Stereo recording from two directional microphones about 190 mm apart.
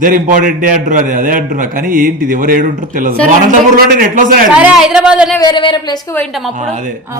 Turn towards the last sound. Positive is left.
turn(degrees=-40)  # may be behind; listen again after turning